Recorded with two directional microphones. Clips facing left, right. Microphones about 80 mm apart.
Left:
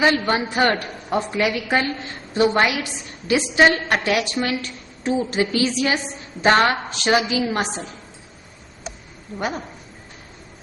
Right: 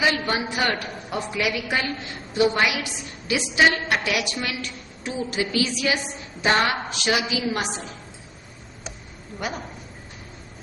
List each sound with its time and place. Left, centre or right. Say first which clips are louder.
0.0 s a woman's voice: left 4 dB; left
7.0 s a woman's voice: left 5 dB; left
9.4 s a woman's voice: left 4 dB; left